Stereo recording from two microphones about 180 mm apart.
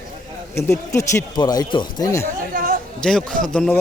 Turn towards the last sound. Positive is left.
turn(degrees=5)  # may be behind; listen again after turning